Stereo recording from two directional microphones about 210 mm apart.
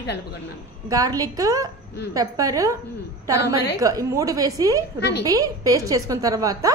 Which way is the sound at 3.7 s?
15° right (ahead or behind).